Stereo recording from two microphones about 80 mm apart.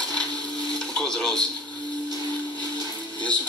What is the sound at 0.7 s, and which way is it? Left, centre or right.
Radio, centre.